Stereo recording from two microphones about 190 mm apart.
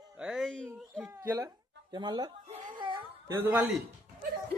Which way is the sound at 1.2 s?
15° right (ahead or behind).